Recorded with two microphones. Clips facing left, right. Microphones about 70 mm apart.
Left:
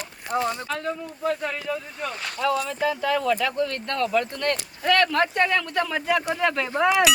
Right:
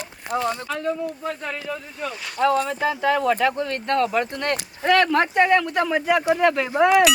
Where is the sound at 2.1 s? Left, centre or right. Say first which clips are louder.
Left 1 dB; left.